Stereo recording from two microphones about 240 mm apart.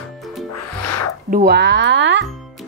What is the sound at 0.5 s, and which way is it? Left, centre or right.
Music, left.